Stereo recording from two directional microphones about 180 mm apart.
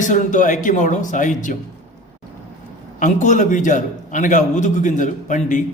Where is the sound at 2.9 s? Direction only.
45° left (ahead or behind).